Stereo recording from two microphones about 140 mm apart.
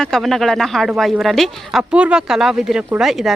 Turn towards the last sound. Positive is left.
turn(degrees=0)  # may be behind; listen again after turning